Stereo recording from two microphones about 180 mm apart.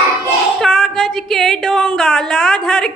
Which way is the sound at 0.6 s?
Centre (ahead or behind).